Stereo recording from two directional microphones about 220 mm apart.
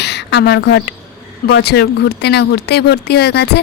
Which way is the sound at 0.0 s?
50° left (ahead or behind).